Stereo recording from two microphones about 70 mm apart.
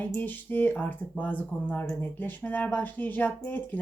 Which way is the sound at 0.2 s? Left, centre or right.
Left.